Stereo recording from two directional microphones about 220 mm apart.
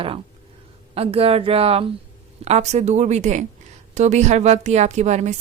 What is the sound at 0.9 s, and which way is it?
A woman's voice, 25° right (ahead or behind).